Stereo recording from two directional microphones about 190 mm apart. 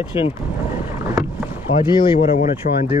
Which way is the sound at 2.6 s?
55° left (ahead or behind).